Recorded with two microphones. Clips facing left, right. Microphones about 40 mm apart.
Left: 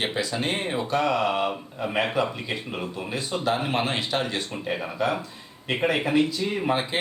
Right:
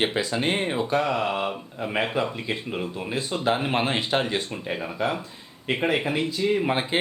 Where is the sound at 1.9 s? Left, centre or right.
Right.